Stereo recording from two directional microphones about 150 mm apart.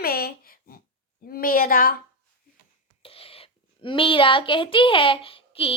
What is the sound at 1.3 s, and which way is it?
Speech, 75° left (ahead or behind).